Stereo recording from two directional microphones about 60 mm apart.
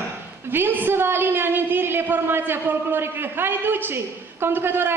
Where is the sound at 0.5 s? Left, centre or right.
Right.